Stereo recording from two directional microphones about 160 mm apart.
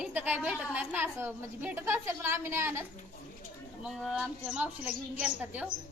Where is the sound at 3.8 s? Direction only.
5° right (ahead or behind).